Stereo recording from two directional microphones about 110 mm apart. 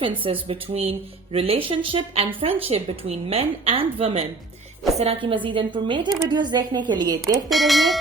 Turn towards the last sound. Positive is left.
turn(degrees=0)  # may be behind; listen again after turning